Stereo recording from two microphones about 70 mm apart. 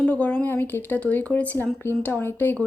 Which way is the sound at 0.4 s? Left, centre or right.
Left.